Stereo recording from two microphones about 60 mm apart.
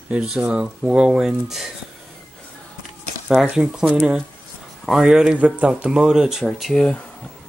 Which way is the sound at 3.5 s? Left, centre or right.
Centre.